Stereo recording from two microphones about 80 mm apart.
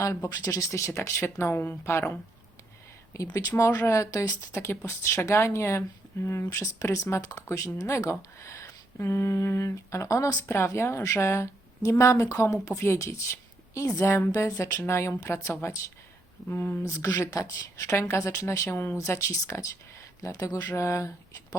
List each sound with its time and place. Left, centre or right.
0.0 s speech: left
3.3 s speech: left
4.5 s speech: left
14.3 s speech: left
14.8 s speech: left
16.8 s speech: left